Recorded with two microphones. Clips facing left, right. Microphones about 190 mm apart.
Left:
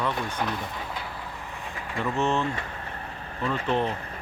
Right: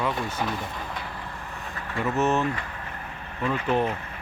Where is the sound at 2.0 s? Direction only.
5° right (ahead or behind).